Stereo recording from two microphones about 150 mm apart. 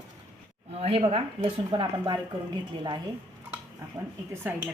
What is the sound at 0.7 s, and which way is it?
A woman's voice, 40° right (ahead or behind).